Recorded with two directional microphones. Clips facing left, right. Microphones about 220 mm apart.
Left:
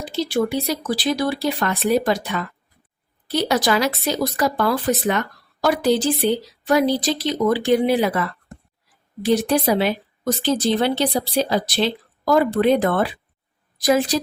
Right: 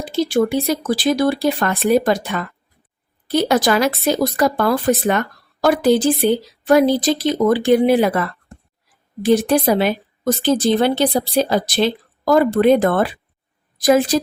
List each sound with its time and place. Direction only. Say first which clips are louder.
0.0 s speech: right 4 dB; 50° right (ahead or behind)